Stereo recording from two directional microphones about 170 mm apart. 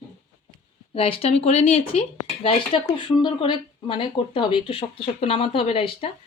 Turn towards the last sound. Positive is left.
turn(degrees=35)  # may be behind; listen again after turning